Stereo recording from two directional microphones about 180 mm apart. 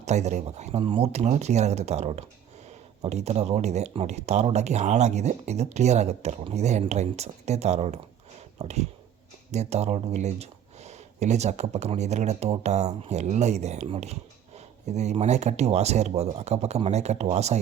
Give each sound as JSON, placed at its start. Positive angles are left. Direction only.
{"t": 0.0, "sound": "speech", "side_deg": -40}